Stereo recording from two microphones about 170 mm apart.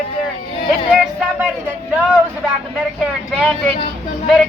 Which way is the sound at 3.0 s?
Centre (ahead or behind).